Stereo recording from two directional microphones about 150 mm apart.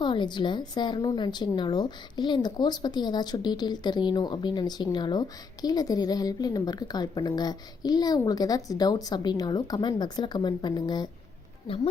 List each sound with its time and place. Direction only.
0.0 s a woman's voice: 30° left (ahead or behind)